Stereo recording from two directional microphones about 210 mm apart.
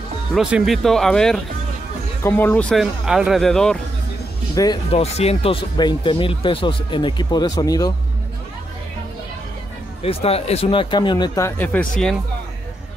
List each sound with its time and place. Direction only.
0.3 s speech: 5° right (ahead or behind)
4.6 s speech: 20° left (ahead or behind)
5.0 s speech: 30° left (ahead or behind)
10.0 s speech: 30° left (ahead or behind); by 12.2 s 5° left (ahead or behind)